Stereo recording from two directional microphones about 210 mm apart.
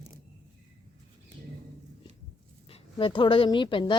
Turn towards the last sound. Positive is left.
turn(degrees=25)  # may be behind; listen again after turning